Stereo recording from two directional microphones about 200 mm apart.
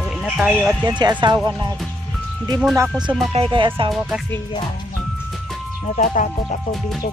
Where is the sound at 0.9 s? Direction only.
20° right (ahead or behind).